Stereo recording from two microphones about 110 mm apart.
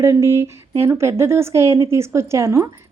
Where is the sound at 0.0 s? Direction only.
25° right (ahead or behind).